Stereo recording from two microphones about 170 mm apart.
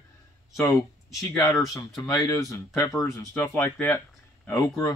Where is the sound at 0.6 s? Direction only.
20° left (ahead or behind).